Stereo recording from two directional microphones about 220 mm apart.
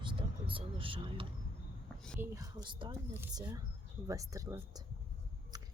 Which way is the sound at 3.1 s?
10° right (ahead or behind).